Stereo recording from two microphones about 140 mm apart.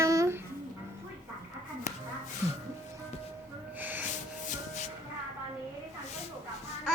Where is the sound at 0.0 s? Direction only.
25° right (ahead or behind).